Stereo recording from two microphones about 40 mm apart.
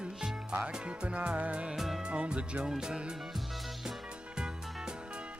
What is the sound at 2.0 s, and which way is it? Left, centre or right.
Music, right.